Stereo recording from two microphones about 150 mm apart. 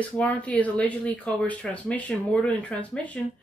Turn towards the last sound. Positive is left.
turn(degrees=10)  # may be behind; listen again after turning